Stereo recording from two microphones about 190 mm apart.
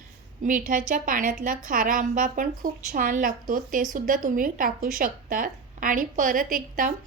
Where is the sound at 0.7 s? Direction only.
45° right (ahead or behind).